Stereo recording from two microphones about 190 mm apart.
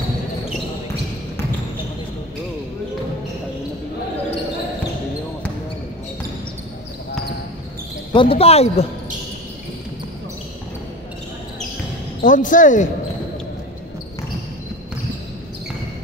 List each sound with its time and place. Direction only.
8.1 s speech: 30° left (ahead or behind)
12.2 s speech: 45° left (ahead or behind)